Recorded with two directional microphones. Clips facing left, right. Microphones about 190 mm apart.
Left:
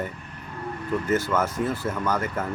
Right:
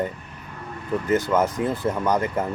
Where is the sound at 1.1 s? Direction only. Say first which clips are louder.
Right 4 dB; 15° right (ahead or behind).